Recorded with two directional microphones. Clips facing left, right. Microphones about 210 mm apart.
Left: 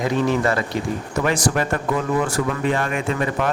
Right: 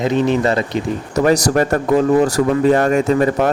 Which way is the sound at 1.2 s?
40° right (ahead or behind).